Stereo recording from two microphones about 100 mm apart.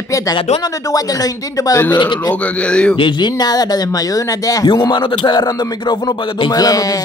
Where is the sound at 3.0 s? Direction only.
50° left (ahead or behind).